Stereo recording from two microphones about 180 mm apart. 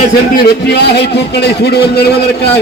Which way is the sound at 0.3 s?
65° left (ahead or behind).